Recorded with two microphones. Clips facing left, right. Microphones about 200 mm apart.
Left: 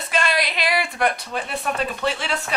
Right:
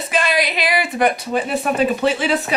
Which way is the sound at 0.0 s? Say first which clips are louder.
Right 4 dB; centre (ahead or behind).